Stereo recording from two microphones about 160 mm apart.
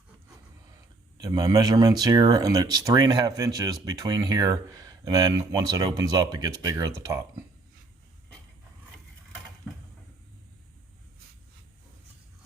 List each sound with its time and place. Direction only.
1.2 s speech: 25° right (ahead or behind)